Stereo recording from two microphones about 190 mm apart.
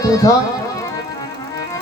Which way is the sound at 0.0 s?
15° left (ahead or behind).